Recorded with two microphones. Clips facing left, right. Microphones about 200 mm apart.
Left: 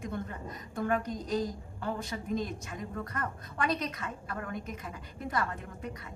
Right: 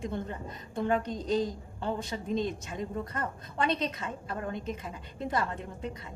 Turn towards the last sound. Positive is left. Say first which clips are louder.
# right 2 dB
turn(degrees=-25)  # may be behind; listen again after turning